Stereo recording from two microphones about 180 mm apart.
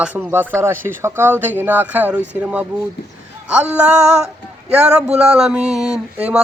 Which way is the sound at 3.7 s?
5° right (ahead or behind).